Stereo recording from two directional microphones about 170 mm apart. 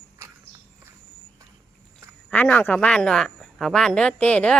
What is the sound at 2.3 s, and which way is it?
Speech, 5° left (ahead or behind).